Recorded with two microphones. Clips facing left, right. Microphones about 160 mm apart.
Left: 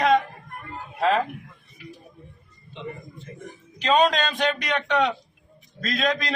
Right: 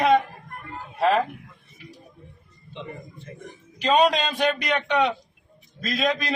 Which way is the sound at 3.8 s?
10° right (ahead or behind).